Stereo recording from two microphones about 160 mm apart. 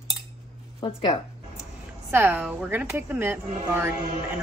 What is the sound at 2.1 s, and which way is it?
A woman's voice, 10° right (ahead or behind).